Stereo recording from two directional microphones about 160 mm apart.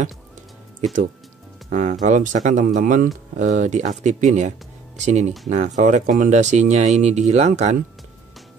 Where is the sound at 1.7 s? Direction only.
50° right (ahead or behind).